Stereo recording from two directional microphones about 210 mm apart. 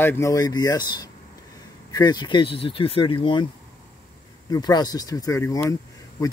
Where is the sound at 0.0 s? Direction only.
10° left (ahead or behind).